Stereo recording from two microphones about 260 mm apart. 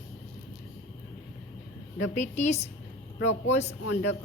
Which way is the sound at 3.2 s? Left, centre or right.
Left.